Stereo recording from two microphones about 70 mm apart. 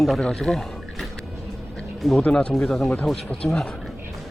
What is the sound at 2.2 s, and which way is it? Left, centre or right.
Speech, centre.